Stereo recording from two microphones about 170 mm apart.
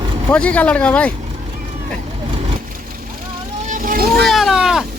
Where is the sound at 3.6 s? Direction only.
50° right (ahead or behind).